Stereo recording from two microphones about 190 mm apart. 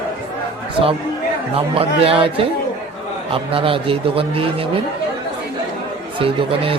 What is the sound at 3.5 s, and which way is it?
Speech, 30° right (ahead or behind).